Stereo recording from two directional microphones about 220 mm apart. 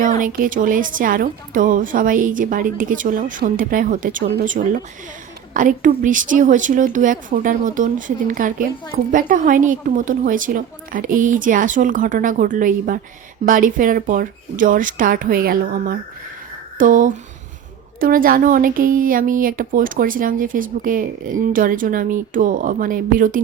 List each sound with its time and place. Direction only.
0.2 s speech: 40° right (ahead or behind)